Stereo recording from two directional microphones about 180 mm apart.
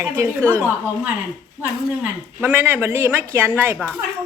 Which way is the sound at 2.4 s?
10° right (ahead or behind).